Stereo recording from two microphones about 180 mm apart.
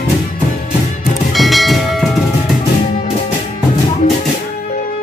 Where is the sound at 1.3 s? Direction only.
Centre (ahead or behind).